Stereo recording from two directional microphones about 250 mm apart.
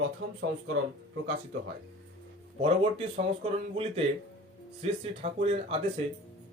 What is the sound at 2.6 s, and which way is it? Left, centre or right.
Speech, right.